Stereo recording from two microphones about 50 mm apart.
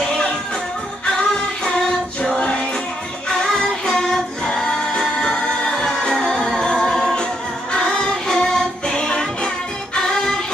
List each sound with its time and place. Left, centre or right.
1.1 s music: centre
3.3 s singing: centre
6.9 s choir: centre
7.7 s music: centre